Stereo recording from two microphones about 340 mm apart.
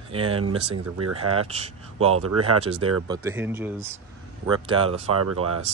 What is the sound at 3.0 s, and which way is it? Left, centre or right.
Speech, centre.